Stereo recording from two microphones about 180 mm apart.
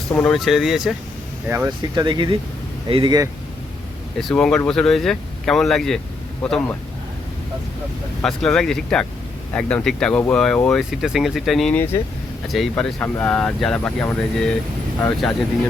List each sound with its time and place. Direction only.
0.1 s speech: 5° left (ahead or behind)
1.5 s speech: 15° right (ahead or behind)
2.0 s speech: 25° right (ahead or behind)
4.2 s speech: 5° left (ahead or behind)
8.2 s speech: 5° left (ahead or behind)